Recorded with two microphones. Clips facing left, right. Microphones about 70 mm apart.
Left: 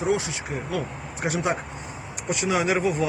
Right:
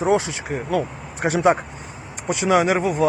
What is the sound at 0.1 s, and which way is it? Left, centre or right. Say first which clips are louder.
Speech: right 6 dB; right.